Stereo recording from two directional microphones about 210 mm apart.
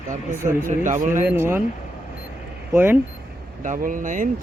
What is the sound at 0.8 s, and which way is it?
Speech, 35° right (ahead or behind).